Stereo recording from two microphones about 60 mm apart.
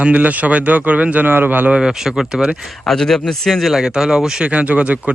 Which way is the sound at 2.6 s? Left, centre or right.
Centre.